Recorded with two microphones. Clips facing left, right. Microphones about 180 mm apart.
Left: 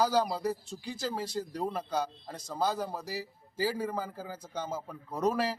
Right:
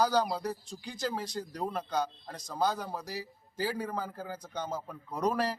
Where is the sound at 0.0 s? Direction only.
5° left (ahead or behind).